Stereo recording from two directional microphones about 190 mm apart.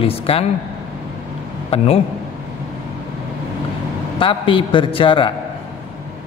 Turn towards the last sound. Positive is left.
turn(degrees=25)  # may be behind; listen again after turning